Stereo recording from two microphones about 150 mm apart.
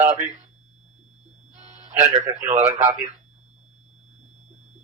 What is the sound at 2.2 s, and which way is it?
Speech, 20° right (ahead or behind).